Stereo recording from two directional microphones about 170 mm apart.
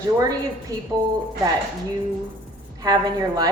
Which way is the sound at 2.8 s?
25° right (ahead or behind).